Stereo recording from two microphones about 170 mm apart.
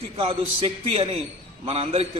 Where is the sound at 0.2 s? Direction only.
35° right (ahead or behind).